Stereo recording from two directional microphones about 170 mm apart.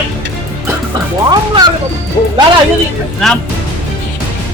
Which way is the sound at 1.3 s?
25° right (ahead or behind).